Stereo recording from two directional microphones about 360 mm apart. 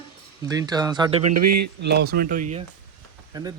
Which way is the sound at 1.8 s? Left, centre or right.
Right.